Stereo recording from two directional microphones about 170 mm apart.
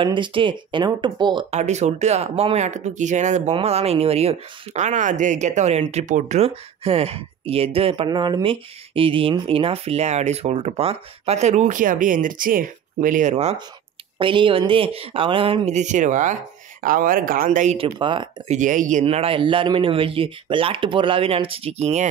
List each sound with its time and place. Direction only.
0.0 s speech: 30° right (ahead or behind)
1.5 s speech: 40° right (ahead or behind)
14.1 s speech: 30° right (ahead or behind); by 17.7 s 50° right (ahead or behind)
17.7 s speech: 30° right (ahead or behind)
18.5 s speech: 50° right (ahead or behind)